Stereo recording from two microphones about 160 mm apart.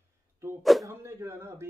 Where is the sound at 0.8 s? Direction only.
15° right (ahead or behind).